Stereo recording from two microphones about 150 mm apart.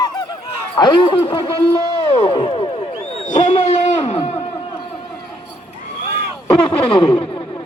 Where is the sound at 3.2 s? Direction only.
45° left (ahead or behind).